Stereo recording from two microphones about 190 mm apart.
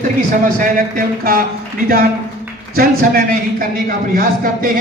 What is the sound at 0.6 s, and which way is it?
Speech, 50° right (ahead or behind).